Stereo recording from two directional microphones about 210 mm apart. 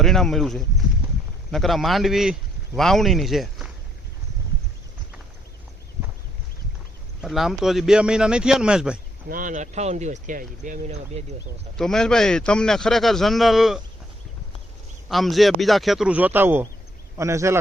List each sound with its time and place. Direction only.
0.0 s a man's voice: centre (ahead or behind)
7.2 s a man's voice: centre (ahead or behind)
9.3 s speech: 40° right (ahead or behind)
11.8 s a man's voice: 5° left (ahead or behind)
15.1 s a man's voice: centre (ahead or behind)